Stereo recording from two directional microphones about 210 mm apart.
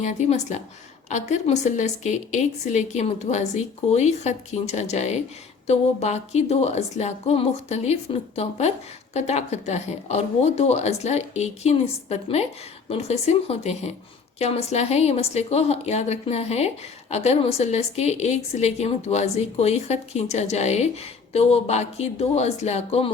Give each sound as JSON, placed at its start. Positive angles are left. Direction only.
{"t": 0.0, "sound": "a woman's voice", "side_deg": 35}